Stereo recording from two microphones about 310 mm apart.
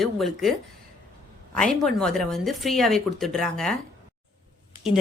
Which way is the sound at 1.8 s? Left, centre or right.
Centre.